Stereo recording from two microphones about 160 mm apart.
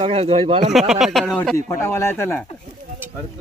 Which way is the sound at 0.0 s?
40° right (ahead or behind).